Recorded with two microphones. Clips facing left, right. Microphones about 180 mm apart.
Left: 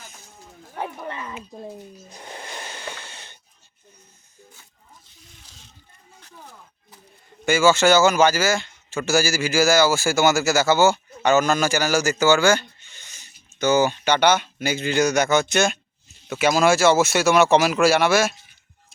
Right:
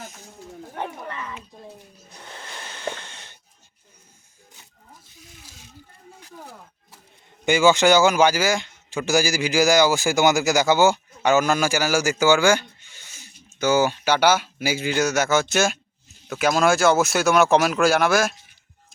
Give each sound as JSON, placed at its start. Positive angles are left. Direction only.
{"t": 2.1, "sound": "wheeze", "side_deg": 15}
{"t": 5.3, "sound": "a sound", "side_deg": -10}
{"t": 7.4, "sound": "speech", "side_deg": -15}